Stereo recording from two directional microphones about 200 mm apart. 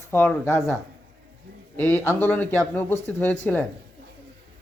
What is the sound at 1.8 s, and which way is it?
A man's voice, 10° left (ahead or behind).